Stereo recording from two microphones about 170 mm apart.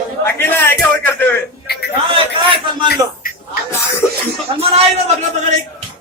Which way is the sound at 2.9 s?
55° left (ahead or behind).